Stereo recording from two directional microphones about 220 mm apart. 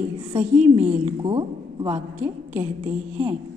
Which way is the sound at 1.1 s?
20° right (ahead or behind).